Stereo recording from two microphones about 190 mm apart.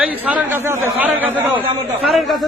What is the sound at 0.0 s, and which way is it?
A man's voice, 10° right (ahead or behind).